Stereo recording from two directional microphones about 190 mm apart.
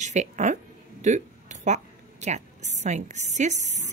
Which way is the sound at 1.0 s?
40° right (ahead or behind).